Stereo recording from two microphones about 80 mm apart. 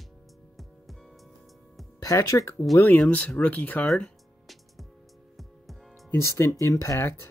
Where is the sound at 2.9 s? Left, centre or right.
Centre.